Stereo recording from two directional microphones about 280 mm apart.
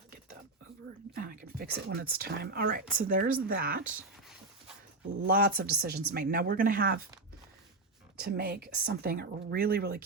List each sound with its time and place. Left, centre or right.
1.1 s a woman's voice: right
5.2 s a woman's voice: right
8.2 s a woman's voice: right